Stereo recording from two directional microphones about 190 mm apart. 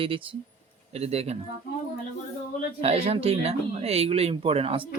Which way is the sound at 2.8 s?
30° right (ahead or behind).